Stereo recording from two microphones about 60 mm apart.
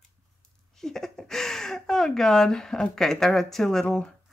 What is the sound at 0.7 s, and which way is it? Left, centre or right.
Speech, centre.